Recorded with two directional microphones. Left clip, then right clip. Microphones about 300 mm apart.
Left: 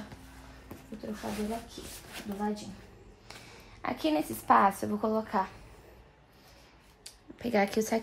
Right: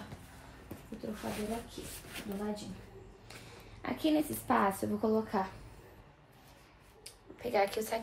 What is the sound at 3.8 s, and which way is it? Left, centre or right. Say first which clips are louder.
A woman's voice: left 2 dB; centre.